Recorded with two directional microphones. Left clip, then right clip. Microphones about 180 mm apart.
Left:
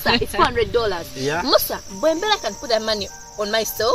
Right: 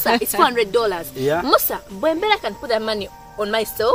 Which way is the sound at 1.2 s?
75° right (ahead or behind).